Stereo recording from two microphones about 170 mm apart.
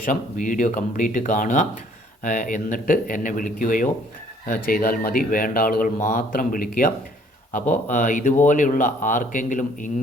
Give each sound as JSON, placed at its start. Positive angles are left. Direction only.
{"t": 0.0, "sound": "speech", "side_deg": 50}
{"t": 7.7, "sound": "speech", "side_deg": 50}